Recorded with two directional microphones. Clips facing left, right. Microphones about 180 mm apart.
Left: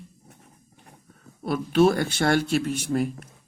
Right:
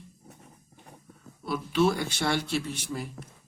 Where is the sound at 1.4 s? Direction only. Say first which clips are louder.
Left 5 dB; 55° left (ahead or behind).